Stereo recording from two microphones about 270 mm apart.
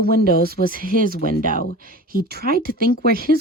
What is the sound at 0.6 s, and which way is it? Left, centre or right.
Speech, left.